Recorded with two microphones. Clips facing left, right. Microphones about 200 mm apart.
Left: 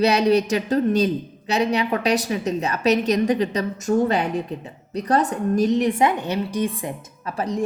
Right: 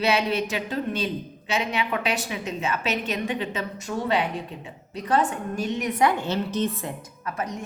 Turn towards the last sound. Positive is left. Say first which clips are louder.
# left 5 dB
turn(degrees=30)  # may be behind; listen again after turning